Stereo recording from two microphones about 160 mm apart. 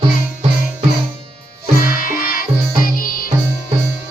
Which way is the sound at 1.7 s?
65° left (ahead or behind).